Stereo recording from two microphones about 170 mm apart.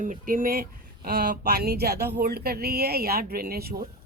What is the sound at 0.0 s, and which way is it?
Speech, 50° right (ahead or behind).